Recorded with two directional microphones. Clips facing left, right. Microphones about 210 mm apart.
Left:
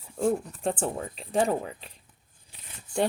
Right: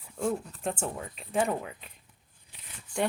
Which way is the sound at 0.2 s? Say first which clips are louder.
Left 4 dB; 30° left (ahead or behind).